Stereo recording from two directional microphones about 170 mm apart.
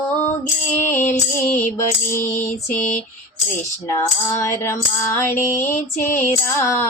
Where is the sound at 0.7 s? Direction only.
10° left (ahead or behind).